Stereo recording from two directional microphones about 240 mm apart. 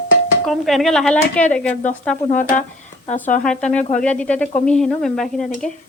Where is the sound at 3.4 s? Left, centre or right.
Centre.